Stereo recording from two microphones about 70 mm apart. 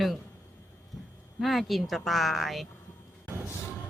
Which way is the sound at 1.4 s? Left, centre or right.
Centre.